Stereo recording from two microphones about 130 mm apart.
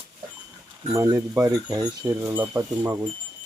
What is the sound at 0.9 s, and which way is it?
Speech, 20° right (ahead or behind).